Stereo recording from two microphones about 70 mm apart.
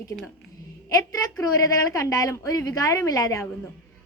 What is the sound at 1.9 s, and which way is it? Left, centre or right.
A woman's voice, left.